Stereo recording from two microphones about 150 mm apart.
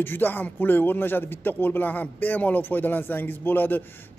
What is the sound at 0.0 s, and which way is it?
Speech, 15° left (ahead or behind).